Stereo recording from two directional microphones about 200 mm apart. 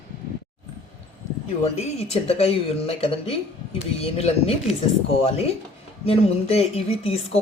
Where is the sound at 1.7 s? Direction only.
30° left (ahead or behind).